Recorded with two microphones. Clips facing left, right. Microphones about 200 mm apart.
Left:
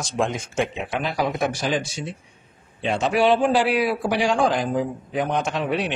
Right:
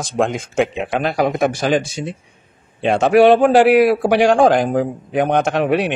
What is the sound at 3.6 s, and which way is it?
Speech, 65° right (ahead or behind).